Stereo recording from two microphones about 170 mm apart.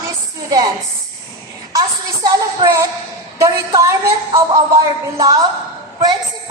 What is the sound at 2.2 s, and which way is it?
A woman's voice, 25° right (ahead or behind).